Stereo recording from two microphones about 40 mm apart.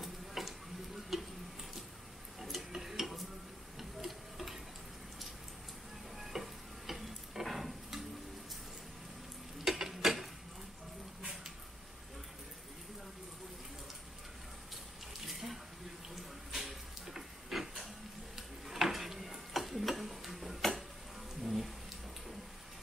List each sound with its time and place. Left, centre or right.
0.0 s stir: centre
2.4 s tick-tock: centre
3.7 s a sound: centre
6.1 s stir: centre
9.7 s stir: centre
15.2 s water: centre
16.5 s a sound: centre
18.7 s tick-tock: centre
21.4 s a sound: centre